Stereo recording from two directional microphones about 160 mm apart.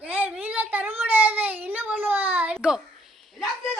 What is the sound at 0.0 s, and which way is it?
Child singing, 10° right (ahead or behind).